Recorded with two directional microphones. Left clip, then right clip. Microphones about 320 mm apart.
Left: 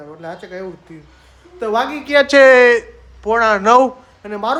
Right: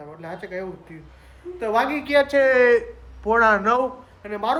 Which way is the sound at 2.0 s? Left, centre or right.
Left.